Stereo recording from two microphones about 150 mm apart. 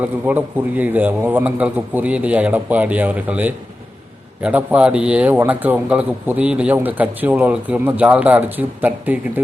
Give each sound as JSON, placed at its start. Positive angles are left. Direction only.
{"t": 0.0, "sound": "a man's voice", "side_deg": -10}